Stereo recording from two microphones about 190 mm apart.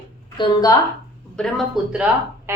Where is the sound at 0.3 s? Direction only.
20° left (ahead or behind).